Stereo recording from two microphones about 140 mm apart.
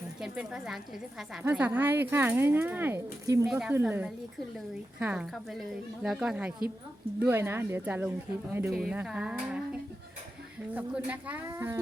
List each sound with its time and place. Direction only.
0.2 s speech: 5° right (ahead or behind)
8.7 s speech: centre (ahead or behind)
10.8 s a child's voice: 10° right (ahead or behind)